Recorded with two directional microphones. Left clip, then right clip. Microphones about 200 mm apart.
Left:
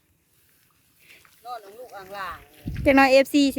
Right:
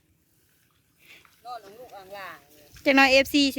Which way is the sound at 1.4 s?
50° left (ahead or behind).